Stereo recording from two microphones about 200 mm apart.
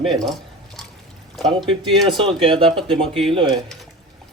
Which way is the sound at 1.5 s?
25° right (ahead or behind).